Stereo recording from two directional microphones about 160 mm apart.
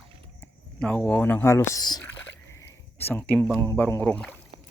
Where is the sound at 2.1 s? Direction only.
15° left (ahead or behind).